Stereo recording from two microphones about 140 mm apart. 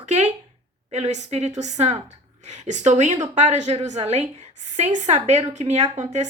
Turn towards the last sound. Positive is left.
turn(degrees=-55)  # may be behind; listen again after turning